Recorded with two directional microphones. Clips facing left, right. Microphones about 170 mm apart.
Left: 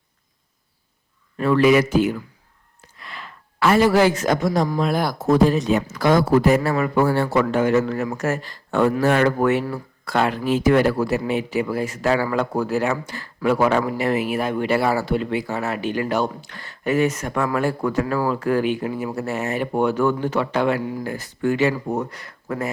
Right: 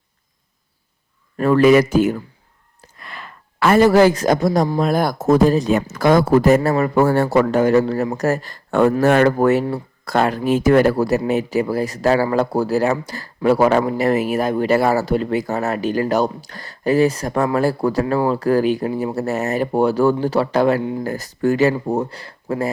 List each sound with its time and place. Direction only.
1.4 s speech: 45° right (ahead or behind)